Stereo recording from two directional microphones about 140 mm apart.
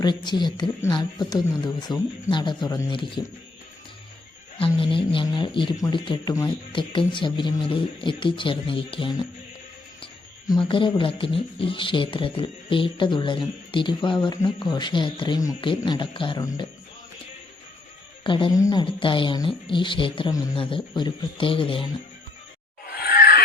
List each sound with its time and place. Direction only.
0.0 s speech: 30° left (ahead or behind)
4.5 s speech: 40° left (ahead or behind)
10.4 s speech: 30° left (ahead or behind)
18.2 s speech: 35° left (ahead or behind)
22.9 s a sound: 90° left